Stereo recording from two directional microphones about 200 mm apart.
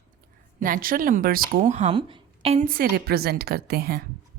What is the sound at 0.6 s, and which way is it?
A woman's voice, 45° right (ahead or behind).